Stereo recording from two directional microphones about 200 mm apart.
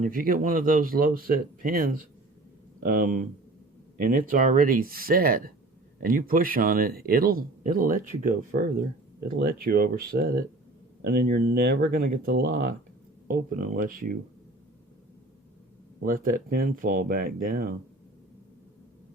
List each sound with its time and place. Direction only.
0.0 s speech: 45° right (ahead or behind)
16.2 s speech: 45° right (ahead or behind)